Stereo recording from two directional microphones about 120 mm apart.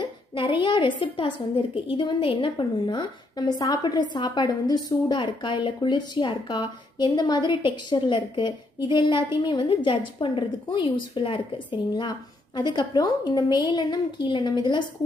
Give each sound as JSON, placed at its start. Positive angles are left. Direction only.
{"t": 0.0, "sound": "a woman's voice", "side_deg": 45}